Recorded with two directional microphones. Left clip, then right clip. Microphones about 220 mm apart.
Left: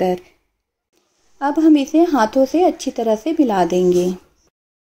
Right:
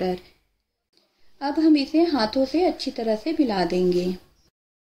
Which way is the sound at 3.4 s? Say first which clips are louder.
Left 8 dB; centre (ahead or behind).